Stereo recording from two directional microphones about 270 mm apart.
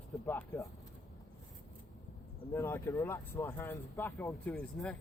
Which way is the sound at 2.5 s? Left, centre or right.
Centre.